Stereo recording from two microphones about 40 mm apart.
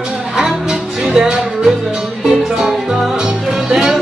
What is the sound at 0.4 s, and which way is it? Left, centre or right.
Music, centre.